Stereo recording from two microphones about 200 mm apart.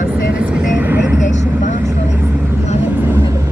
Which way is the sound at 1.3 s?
35° left (ahead or behind).